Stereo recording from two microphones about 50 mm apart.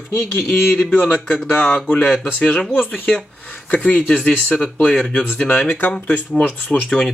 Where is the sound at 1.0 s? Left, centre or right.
Centre.